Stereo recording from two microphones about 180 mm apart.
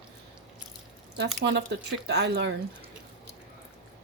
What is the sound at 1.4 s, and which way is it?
Speech, 75° right (ahead or behind).